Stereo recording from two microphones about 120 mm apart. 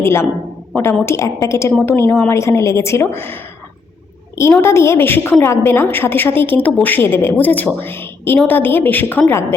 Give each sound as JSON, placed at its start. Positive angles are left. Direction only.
{"t": 0.0, "sound": "a woman's voice", "side_deg": 20}